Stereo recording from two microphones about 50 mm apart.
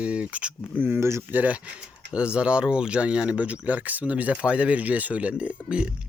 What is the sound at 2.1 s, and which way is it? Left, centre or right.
Speech, centre.